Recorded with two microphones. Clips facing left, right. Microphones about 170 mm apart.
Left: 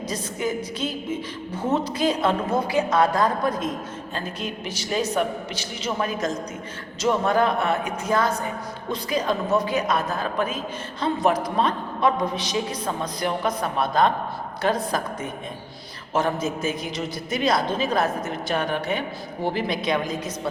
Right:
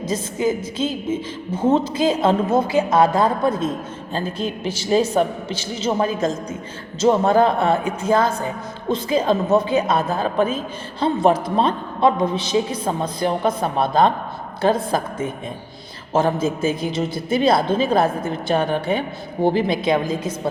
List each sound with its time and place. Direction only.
0.1 s a woman's voice: 25° right (ahead or behind)